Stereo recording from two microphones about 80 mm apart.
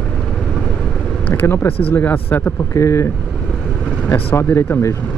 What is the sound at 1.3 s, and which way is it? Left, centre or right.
Speech, left.